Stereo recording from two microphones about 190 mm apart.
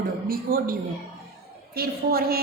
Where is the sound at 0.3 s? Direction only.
50° right (ahead or behind).